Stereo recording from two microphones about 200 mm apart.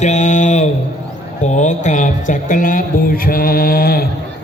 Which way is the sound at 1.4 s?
35° left (ahead or behind).